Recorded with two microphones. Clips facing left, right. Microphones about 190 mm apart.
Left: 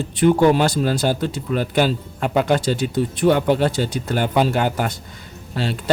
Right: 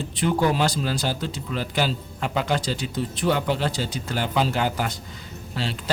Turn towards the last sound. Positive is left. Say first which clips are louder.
# left 7 dB
turn(degrees=55)  # may be behind; listen again after turning